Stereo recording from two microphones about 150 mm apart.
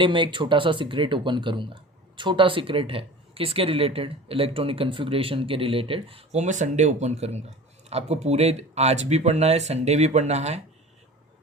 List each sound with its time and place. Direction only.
0.0 s speech: 35° right (ahead or behind)
6.4 s speech: 55° right (ahead or behind)